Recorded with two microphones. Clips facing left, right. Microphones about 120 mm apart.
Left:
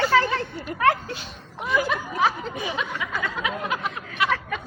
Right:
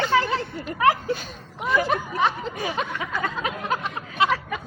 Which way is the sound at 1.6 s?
Centre (ahead or behind).